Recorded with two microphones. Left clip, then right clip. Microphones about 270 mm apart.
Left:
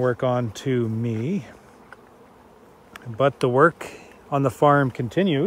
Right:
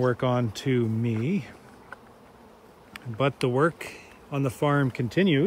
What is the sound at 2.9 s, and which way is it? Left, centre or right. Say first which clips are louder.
Speech: left 6 dB; centre.